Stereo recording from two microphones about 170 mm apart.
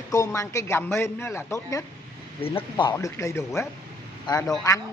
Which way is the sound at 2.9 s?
15° left (ahead or behind).